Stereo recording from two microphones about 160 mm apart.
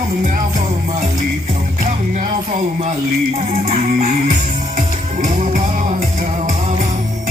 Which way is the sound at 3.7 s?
45° right (ahead or behind).